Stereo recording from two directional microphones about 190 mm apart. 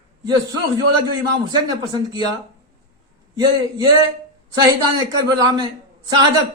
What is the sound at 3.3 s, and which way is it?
A man's voice, 20° right (ahead or behind).